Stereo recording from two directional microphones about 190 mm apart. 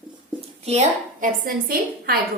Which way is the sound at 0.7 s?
40° right (ahead or behind).